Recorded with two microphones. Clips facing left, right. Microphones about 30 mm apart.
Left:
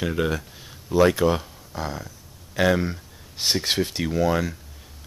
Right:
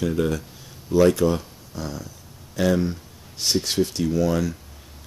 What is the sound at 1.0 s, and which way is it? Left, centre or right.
Speech, left.